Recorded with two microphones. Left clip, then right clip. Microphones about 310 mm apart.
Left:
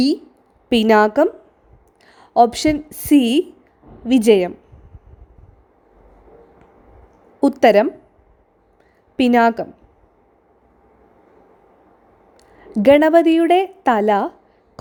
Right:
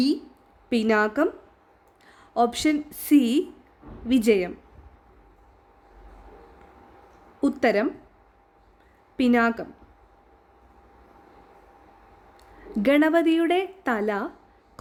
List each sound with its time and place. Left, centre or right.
0.7 s a woman's voice: left
7.4 s a woman's voice: left
9.1 s a woman's voice: left
12.4 s a woman's voice: left